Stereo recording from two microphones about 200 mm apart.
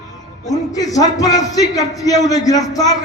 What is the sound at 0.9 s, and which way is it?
A man's voice, 20° left (ahead or behind).